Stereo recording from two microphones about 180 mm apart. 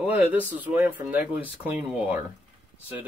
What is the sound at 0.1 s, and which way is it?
Speech, 10° right (ahead or behind).